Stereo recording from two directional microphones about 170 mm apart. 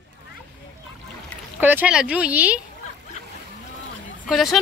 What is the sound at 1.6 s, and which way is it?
Speech, 10° right (ahead or behind).